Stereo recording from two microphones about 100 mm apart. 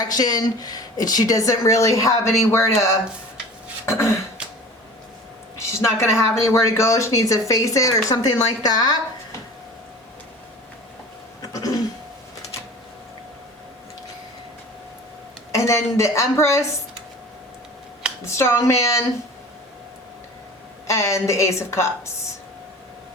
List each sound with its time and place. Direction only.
0.0 s a woman's voice: 40° left (ahead or behind)
5.5 s speech: 30° left (ahead or behind)
15.5 s a woman's voice: 30° left (ahead or behind)
18.3 s a woman's voice: 25° left (ahead or behind)
20.8 s a woman's voice: 30° left (ahead or behind)